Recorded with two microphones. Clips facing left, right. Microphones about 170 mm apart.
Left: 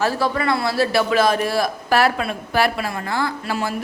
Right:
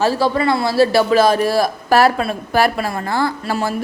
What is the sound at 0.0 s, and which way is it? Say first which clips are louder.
A woman's voice: right 4 dB; 30° right (ahead or behind).